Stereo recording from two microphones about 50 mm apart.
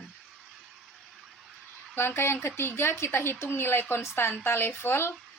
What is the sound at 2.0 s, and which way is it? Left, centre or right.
A woman's voice, left.